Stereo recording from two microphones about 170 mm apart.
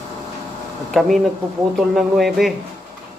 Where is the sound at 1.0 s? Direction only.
Centre (ahead or behind).